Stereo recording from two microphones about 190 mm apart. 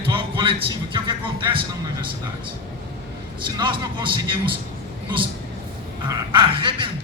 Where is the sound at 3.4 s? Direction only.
25° right (ahead or behind).